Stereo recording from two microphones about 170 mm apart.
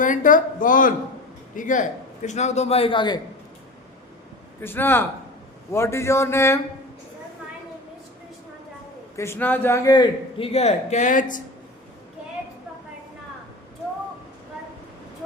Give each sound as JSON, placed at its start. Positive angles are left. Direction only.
{"t": 0.0, "sound": "a man's voice", "side_deg": 50}
{"t": 4.6, "sound": "speech", "side_deg": 10}
{"t": 9.1, "sound": "a man's voice", "side_deg": 15}